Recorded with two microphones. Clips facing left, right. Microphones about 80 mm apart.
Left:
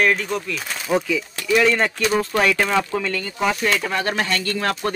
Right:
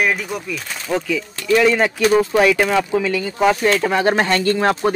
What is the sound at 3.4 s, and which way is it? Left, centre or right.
Speech, right.